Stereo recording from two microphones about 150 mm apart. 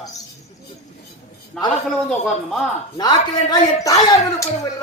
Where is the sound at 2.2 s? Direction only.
Centre (ahead or behind).